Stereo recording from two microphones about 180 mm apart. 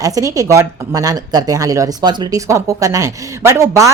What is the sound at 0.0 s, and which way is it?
Speech, 20° right (ahead or behind).